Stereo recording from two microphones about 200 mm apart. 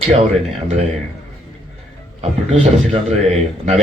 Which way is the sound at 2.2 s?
30° right (ahead or behind).